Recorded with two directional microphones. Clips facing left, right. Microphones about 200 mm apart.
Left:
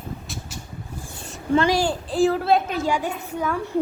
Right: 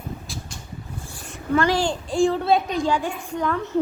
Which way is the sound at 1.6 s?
10° left (ahead or behind).